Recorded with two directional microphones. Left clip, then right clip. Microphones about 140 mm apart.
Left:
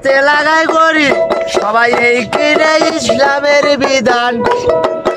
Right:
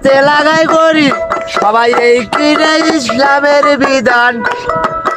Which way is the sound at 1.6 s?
20° right (ahead or behind).